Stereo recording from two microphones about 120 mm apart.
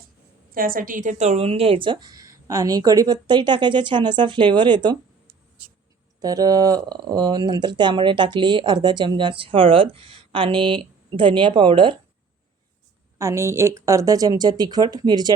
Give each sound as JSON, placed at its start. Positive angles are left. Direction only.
{"t": 0.9, "sound": "speech", "side_deg": -90}
{"t": 13.1, "sound": "speech", "side_deg": -25}